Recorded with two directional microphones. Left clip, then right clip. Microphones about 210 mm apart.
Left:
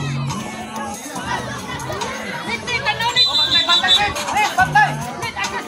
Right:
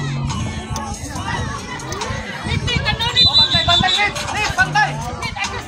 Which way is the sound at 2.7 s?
50° right (ahead or behind).